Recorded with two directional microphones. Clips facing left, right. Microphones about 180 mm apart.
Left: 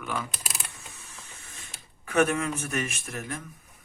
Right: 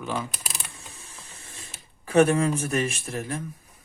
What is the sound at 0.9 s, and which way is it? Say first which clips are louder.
Mechanisms: right 1 dB; 35° right (ahead or behind).